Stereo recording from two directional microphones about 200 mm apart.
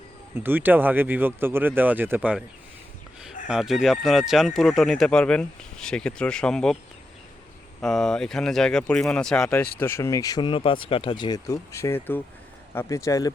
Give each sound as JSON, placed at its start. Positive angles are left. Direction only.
{"t": 0.4, "sound": "speech", "side_deg": -10}
{"t": 3.4, "sound": "speech", "side_deg": -5}
{"t": 7.8, "sound": "speech", "side_deg": 0}